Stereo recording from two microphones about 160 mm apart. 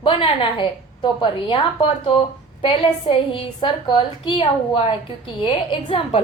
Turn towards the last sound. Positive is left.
turn(degrees=35)  # may be behind; listen again after turning